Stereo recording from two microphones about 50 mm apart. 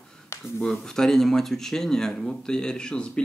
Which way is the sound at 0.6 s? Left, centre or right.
Centre.